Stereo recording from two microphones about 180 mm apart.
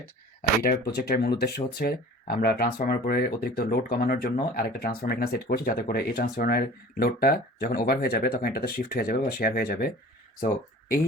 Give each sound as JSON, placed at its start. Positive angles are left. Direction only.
{"t": 0.6, "sound": "speech", "side_deg": 60}